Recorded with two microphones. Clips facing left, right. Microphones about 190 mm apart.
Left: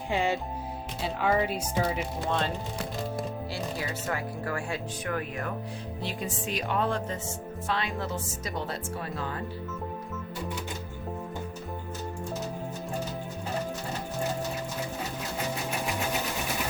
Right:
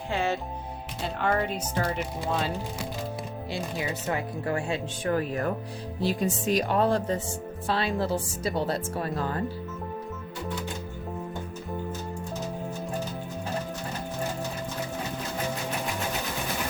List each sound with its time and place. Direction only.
0.1 s speech: 15° left (ahead or behind)
1.0 s speech: 5° left (ahead or behind)
3.5 s speech: 20° right (ahead or behind); by 9.3 s 40° right (ahead or behind)